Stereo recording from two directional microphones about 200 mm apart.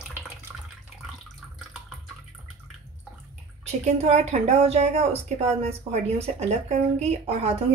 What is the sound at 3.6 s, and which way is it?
A woman's voice, 30° right (ahead or behind).